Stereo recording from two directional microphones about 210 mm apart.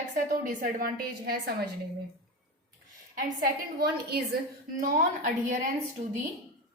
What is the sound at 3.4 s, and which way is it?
A woman's voice, 45° right (ahead or behind).